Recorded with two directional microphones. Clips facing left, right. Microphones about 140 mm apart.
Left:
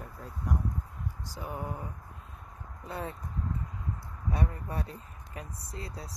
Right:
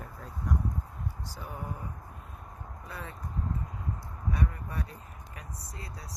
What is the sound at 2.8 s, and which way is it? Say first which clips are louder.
Speech: left 6 dB; 25° left (ahead or behind).